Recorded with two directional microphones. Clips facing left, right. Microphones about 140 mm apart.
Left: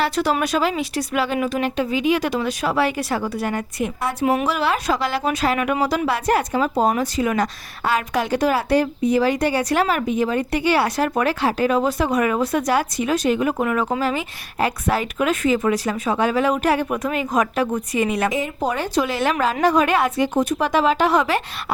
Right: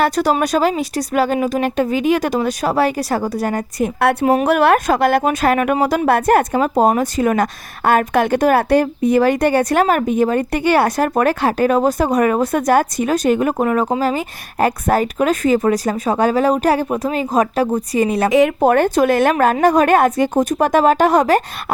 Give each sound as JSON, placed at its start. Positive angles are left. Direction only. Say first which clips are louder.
{"t": 0.0, "sound": "speech", "louder": "right 4 dB", "side_deg": -40}
{"t": 4.0, "sound": "a woman's voice", "louder": "right 6 dB", "side_deg": -65}
{"t": 18.3, "sound": "speech", "louder": "right 10 dB", "side_deg": -75}